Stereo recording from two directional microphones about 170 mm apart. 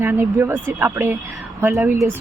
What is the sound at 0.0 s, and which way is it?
Speech, 15° right (ahead or behind).